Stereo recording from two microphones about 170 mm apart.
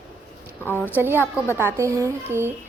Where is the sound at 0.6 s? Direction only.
10° left (ahead or behind).